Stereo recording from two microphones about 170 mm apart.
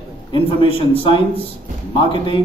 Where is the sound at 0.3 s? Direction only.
30° left (ahead or behind).